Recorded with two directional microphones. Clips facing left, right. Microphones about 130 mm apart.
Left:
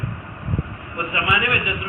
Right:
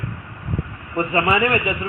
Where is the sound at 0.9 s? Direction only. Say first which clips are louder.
Right 5 dB; 35° right (ahead or behind).